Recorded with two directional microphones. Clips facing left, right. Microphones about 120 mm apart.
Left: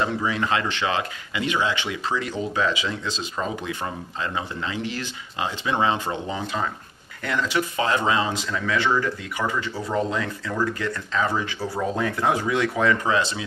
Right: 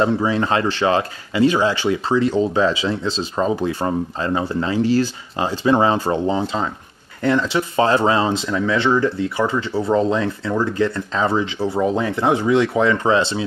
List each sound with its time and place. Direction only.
0.0 s speech: 30° right (ahead or behind)